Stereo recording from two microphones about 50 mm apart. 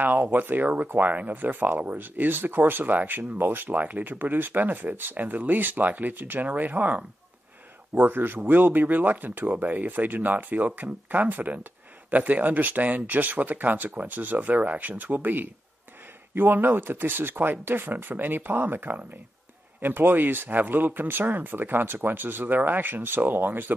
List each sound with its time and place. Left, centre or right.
0.0 s speech: right
7.9 s speech: right